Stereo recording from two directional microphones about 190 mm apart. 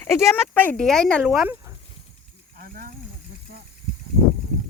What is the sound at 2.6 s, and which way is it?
Speech, 50° right (ahead or behind).